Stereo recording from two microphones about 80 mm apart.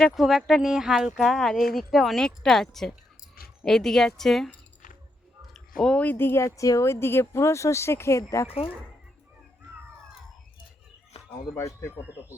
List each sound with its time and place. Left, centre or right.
0.0 s speech: centre
5.5 s a sound: centre
6.0 s speech: left